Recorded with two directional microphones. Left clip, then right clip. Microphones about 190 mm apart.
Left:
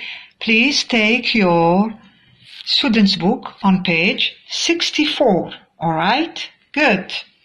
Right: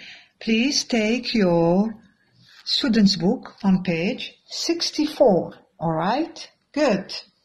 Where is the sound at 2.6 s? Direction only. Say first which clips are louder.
Left 5 dB; 45° right (ahead or behind).